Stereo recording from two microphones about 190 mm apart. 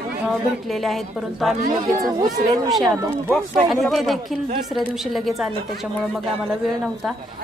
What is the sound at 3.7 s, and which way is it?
A woman's voice, centre (ahead or behind).